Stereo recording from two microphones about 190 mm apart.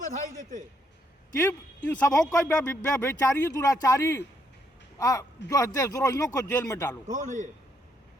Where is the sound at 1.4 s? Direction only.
15° left (ahead or behind).